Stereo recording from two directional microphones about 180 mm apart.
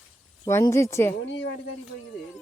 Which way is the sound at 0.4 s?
15° left (ahead or behind).